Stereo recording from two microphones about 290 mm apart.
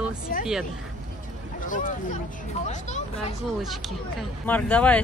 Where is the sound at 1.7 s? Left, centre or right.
Left.